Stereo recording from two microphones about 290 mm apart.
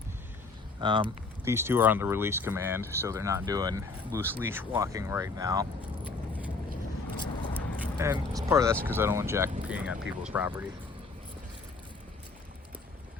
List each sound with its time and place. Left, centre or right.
0.8 s speech: centre
6.1 s vehicle: centre
7.2 s a sound: centre
7.9 s speech: centre